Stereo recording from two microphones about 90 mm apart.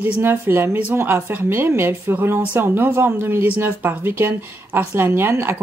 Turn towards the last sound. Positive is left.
turn(degrees=-25)  # may be behind; listen again after turning